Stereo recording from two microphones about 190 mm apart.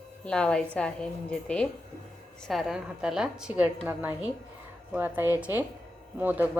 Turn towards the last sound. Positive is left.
turn(degrees=-10)  # may be behind; listen again after turning